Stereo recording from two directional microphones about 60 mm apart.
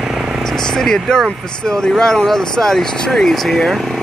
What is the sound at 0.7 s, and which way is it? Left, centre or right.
Speech, centre.